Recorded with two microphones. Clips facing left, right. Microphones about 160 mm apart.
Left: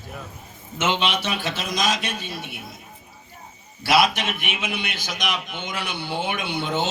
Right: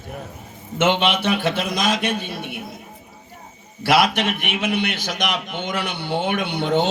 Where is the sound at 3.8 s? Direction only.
60° right (ahead or behind).